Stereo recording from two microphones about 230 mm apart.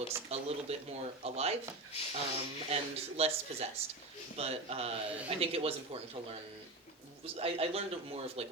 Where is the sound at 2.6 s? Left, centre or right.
Right.